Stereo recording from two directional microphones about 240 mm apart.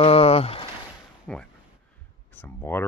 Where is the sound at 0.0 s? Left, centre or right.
Left.